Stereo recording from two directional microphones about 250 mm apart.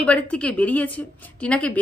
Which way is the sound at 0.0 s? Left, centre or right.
Centre.